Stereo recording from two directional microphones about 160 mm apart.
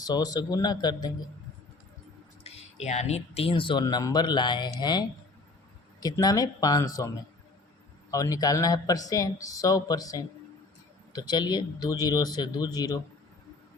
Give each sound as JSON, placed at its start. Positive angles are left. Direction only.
{"t": 0.0, "sound": "speech", "side_deg": 25}
{"t": 2.4, "sound": "speech", "side_deg": 40}
{"t": 8.1, "sound": "speech", "side_deg": 20}